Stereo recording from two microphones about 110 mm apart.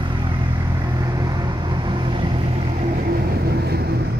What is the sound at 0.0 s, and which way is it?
Vehicle, 45° right (ahead or behind).